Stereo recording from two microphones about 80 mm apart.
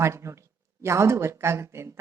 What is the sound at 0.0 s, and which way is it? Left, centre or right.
A woman's voice, right.